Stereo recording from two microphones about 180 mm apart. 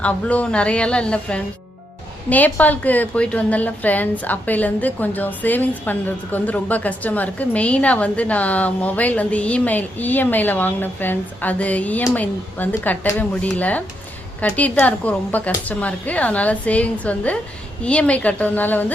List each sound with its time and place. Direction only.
0.0 s a woman's voice: 5° left (ahead or behind)